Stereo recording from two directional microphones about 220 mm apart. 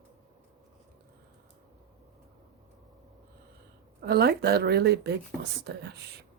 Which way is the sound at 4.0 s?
45° right (ahead or behind).